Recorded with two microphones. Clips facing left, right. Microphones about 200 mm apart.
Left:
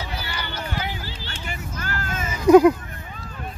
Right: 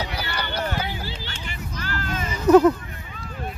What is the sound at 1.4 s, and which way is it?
Vehicle, 45° left (ahead or behind).